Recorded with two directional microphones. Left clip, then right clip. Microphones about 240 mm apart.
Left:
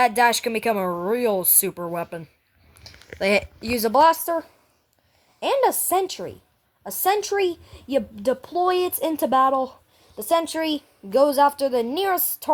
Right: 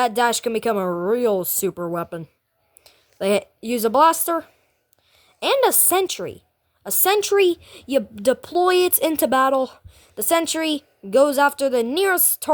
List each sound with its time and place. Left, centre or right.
0.1 s speech: right
0.9 s a woman's voice: right
1.3 s speech: right
1.7 s a woman's voice: right
3.2 s a woman's voice: right